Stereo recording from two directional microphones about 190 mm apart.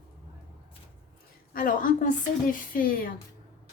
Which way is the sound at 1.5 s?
45° left (ahead or behind).